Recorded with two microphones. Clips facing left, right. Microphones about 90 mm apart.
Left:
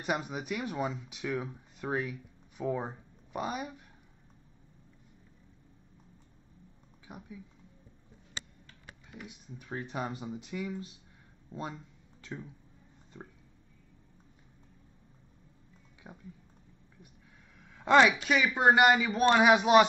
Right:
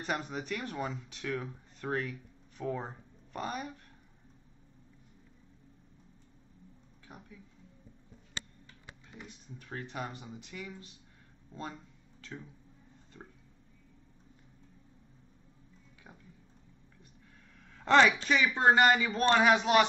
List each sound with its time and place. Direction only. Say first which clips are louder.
0.0 s speech: left 2 dB; 10° left (ahead or behind)
7.1 s speech: left 4 dB; 10° left (ahead or behind)
9.1 s speech: left 3 dB; 5° left (ahead or behind)
9.9 s speech: left 6 dB; 20° left (ahead or behind)
12.2 s speech: left 3 dB; 15° left (ahead or behind)
13.1 s a sound: left 3 dB; 15° left (ahead or behind)
16.0 s speech: left 5 dB; 20° left (ahead or behind)
17.6 s speech: left 1 dB; 5° left (ahead or behind)